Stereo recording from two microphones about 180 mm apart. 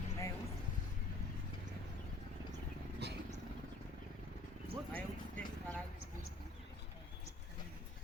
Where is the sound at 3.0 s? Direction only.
65° right (ahead or behind).